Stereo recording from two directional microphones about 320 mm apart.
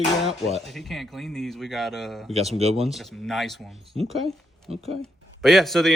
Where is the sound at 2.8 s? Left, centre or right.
Centre.